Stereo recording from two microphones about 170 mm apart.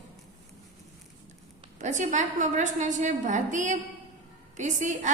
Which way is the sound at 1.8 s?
45° right (ahead or behind).